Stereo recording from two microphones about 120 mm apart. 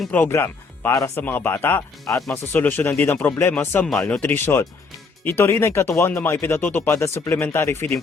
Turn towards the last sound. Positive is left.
turn(degrees=20)  # may be behind; listen again after turning